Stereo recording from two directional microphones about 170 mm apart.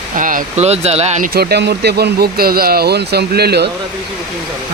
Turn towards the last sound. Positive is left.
turn(degrees=-70)  # may be behind; listen again after turning